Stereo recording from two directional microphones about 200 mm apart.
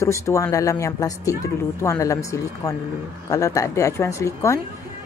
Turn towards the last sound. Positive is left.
turn(degrees=15)  # may be behind; listen again after turning